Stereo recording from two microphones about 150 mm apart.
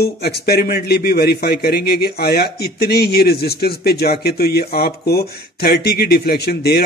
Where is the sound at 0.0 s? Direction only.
90° left.